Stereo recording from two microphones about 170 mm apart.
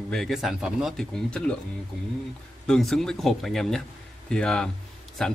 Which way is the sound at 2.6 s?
Centre (ahead or behind).